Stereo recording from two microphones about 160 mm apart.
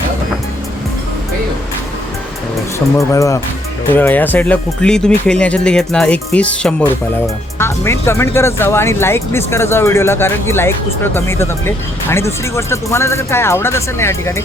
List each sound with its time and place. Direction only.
2.7 s speech: 20° left (ahead or behind)